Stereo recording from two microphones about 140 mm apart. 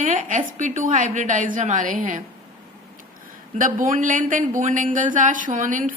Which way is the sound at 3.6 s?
70° right (ahead or behind).